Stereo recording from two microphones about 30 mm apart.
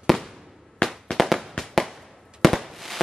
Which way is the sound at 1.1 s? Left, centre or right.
Centre.